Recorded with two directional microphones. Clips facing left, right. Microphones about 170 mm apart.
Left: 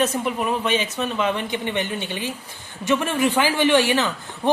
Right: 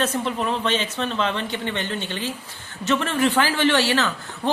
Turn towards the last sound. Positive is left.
turn(degrees=15)  # may be behind; listen again after turning